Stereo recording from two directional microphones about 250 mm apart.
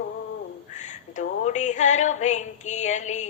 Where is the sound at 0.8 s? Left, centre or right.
Left.